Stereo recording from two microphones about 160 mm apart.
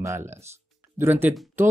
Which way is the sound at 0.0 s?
20° right (ahead or behind).